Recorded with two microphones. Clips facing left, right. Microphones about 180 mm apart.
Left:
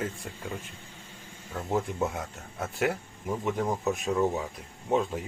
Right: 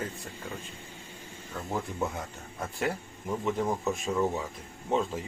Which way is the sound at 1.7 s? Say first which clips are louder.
Left 4 dB; 5° left (ahead or behind).